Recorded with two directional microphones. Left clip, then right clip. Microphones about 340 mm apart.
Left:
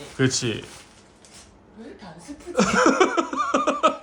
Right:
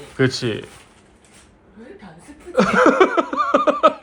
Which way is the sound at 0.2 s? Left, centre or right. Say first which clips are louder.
Right 4 dB; centre.